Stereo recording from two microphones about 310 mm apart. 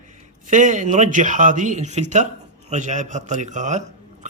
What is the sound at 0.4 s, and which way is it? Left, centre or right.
A man's voice, right.